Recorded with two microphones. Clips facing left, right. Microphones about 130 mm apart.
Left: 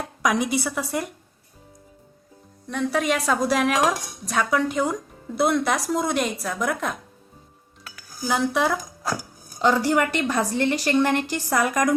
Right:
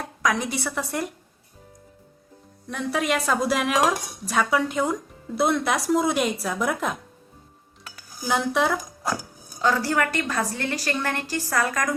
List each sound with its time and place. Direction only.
0.2 s a woman's voice: 15° left (ahead or behind)
2.6 s speech: centre (ahead or behind)
8.2 s speech: centre (ahead or behind)
9.6 s a woman's voice: 20° left (ahead or behind)